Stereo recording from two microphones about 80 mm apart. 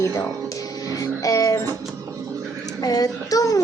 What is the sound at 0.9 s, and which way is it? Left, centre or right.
Music, left.